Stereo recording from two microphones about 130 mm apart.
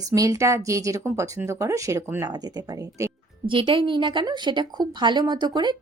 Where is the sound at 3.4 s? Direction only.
40° right (ahead or behind).